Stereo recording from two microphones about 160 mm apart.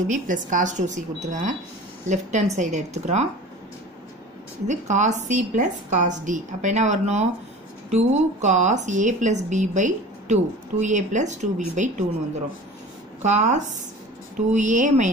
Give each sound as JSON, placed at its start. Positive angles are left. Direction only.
{"t": 0.0, "sound": "a woman's voice", "side_deg": -55}
{"t": 4.6, "sound": "a woman's voice", "side_deg": -50}
{"t": 13.2, "sound": "a woman's voice", "side_deg": -50}